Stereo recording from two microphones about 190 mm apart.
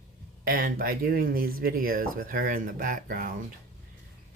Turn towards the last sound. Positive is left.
turn(degrees=-50)  # may be behind; listen again after turning